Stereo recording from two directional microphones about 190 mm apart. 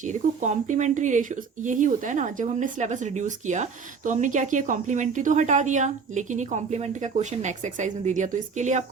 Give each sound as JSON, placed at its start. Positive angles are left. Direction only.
{"t": 0.0, "sound": "speech", "side_deg": -40}